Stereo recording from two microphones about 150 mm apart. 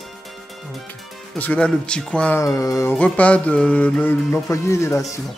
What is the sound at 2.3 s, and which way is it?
Speech, 20° left (ahead or behind).